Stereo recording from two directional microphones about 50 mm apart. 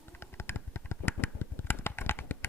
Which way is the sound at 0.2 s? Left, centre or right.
Left.